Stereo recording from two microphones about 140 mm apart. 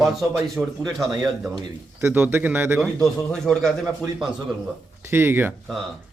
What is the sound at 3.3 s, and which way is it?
Speech, 5° left (ahead or behind).